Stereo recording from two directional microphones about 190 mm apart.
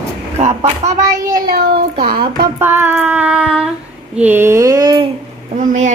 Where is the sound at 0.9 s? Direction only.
15° right (ahead or behind).